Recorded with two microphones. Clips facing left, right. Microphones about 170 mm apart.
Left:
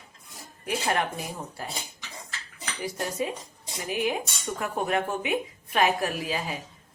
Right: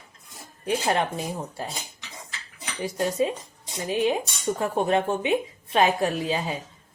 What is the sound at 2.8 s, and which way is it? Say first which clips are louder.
A woman's voice: right 6 dB; 25° right (ahead or behind).